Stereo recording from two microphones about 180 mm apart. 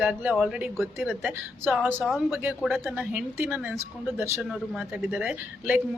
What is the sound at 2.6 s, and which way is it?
A woman's voice, centre (ahead or behind).